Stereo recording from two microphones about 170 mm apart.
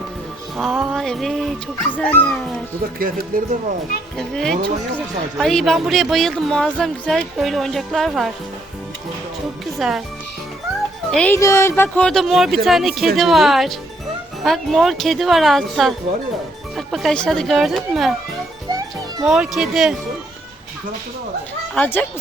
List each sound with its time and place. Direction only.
0.5 s speech: centre (ahead or behind)
3.0 s speech: 55° right (ahead or behind)
4.2 s speech: centre (ahead or behind)
9.7 s speech: centre (ahead or behind)
11.1 s speech: 5° left (ahead or behind)
11.3 s speech: 15° left (ahead or behind)
11.8 s speech: 5° left (ahead or behind)
19.2 s speech: 5° right (ahead or behind)
21.8 s speech: 10° left (ahead or behind)